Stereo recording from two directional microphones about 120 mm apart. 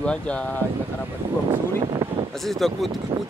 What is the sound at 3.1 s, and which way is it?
Speech, 35° right (ahead or behind).